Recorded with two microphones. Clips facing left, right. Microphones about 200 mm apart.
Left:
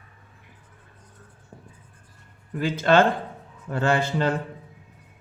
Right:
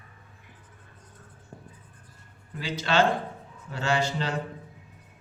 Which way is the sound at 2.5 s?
55° left (ahead or behind).